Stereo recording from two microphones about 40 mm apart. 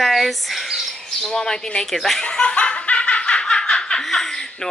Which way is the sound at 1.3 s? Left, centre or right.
Centre.